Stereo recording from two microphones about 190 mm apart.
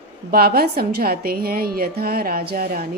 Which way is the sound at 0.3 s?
55° right (ahead or behind).